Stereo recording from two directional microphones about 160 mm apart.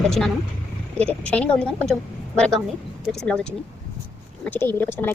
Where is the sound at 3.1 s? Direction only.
5° left (ahead or behind).